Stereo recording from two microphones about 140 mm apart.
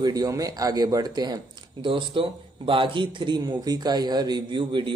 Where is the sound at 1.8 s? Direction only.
40° right (ahead or behind).